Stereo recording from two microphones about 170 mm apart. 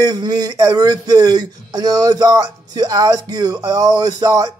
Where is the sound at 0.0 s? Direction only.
25° right (ahead or behind).